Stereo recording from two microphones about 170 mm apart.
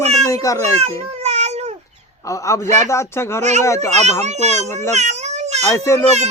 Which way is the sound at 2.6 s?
45° right (ahead or behind).